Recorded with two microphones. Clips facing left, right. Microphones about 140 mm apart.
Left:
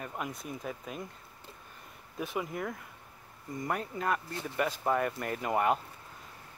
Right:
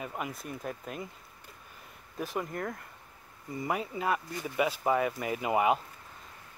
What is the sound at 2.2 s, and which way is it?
Speech, centre (ahead or behind).